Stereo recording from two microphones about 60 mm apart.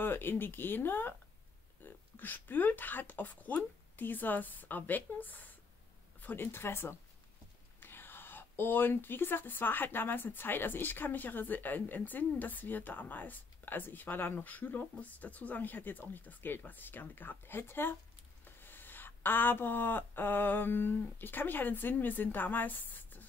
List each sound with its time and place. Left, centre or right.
0.0 s speech: left